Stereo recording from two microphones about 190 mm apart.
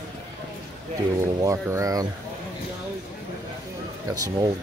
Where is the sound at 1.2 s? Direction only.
15° right (ahead or behind).